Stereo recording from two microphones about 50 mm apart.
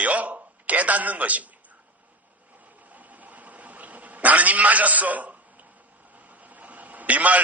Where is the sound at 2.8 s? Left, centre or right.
Right.